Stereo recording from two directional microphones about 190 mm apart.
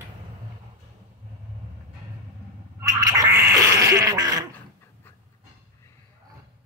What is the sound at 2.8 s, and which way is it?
Gargling, 20° right (ahead or behind).